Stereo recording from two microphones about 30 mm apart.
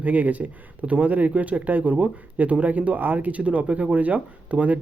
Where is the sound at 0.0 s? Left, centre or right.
Right.